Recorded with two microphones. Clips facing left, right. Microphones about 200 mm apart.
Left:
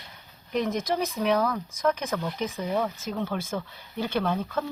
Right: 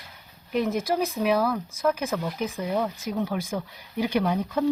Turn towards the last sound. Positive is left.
turn(degrees=-10)  # may be behind; listen again after turning